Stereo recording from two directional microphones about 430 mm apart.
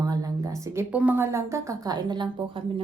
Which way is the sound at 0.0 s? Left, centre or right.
Centre.